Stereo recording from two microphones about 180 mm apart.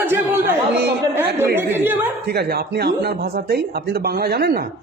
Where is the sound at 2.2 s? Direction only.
60° right (ahead or behind).